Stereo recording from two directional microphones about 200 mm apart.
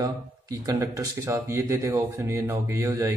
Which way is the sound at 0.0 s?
15° right (ahead or behind).